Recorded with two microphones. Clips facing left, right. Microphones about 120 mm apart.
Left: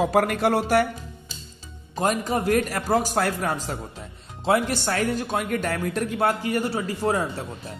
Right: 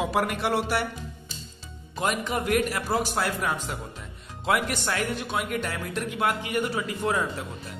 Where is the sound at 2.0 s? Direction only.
40° left (ahead or behind).